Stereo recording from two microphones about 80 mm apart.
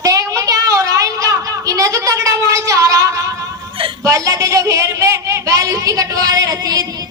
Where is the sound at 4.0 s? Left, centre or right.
Right.